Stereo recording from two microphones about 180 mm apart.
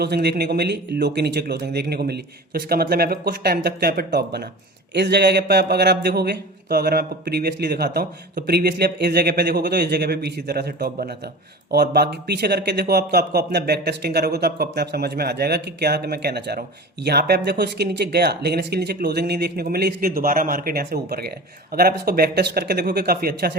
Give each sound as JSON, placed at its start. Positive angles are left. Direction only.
{"t": 0.0, "sound": "speech", "side_deg": -65}